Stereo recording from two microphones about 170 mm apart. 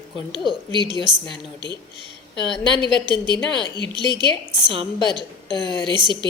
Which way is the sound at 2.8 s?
30° right (ahead or behind).